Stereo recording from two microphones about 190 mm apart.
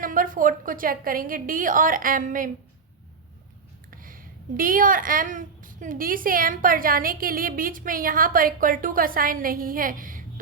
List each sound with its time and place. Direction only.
0.0 s speech: 45° right (ahead or behind)
3.9 s speech: 45° right (ahead or behind)